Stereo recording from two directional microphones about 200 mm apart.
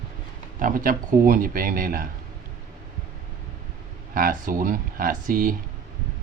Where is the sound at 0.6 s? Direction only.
45° right (ahead or behind).